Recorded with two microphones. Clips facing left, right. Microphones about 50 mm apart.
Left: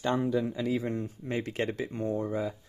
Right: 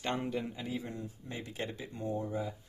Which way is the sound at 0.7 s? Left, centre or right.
Left.